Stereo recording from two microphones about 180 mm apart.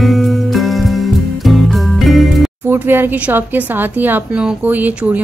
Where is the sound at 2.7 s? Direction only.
10° right (ahead or behind).